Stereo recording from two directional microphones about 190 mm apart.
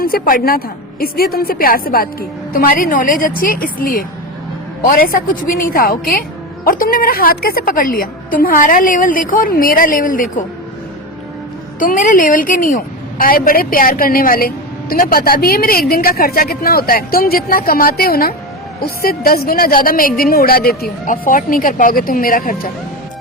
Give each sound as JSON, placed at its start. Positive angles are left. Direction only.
{"t": 0.0, "sound": "a woman's voice", "side_deg": 50}
{"t": 11.8, "sound": "a woman's voice", "side_deg": 45}